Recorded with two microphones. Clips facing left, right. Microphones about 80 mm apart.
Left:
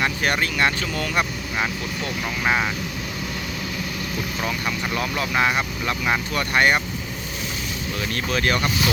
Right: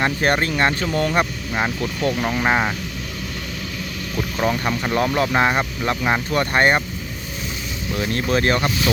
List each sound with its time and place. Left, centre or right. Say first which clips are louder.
0.0 s speech: right 3 dB; right
1.8 s speech: right 6 dB; right
4.4 s speech: right 7 dB; right
7.9 s speech: right 5 dB; right